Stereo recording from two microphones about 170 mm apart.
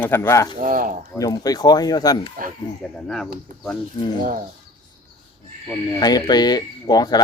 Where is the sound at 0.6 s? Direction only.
50° right (ahead or behind).